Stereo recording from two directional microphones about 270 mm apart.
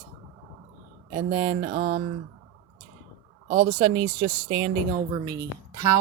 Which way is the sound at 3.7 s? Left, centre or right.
Right.